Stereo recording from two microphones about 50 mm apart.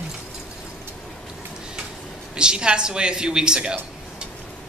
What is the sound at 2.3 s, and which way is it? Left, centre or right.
A woman's voice, centre.